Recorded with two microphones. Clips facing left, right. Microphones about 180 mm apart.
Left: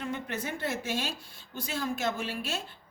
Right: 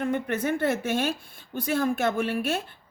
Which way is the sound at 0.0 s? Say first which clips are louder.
Right 8 dB; 55° right (ahead or behind).